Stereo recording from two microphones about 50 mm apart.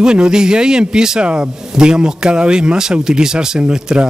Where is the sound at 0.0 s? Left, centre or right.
Centre.